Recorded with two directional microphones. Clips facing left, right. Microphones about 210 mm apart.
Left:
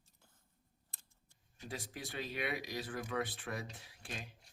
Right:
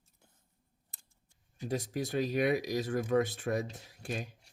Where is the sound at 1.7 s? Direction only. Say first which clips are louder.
Right 11 dB; 45° right (ahead or behind).